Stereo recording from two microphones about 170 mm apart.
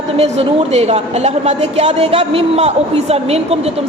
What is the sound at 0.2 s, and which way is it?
Speech, 40° right (ahead or behind).